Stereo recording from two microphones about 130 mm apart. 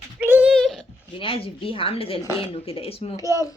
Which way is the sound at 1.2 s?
45° left (ahead or behind).